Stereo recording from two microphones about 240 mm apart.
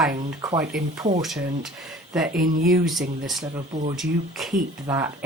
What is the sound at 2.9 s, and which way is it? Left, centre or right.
Speech, centre.